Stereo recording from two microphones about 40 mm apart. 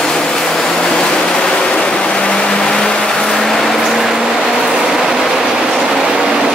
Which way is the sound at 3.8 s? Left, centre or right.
Centre.